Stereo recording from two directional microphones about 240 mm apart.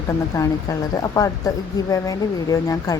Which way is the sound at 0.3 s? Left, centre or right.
Centre.